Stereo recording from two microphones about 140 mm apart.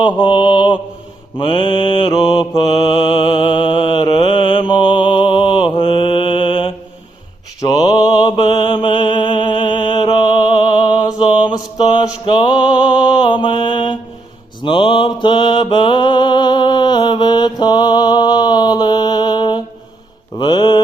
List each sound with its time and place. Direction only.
0.0 s mantra: 35° left (ahead or behind)